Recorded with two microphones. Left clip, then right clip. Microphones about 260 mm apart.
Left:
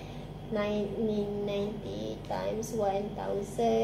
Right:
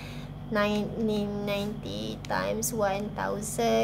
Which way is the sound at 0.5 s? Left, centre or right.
Centre.